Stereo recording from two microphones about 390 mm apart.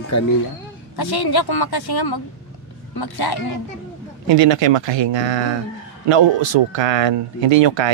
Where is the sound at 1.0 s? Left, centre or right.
Left.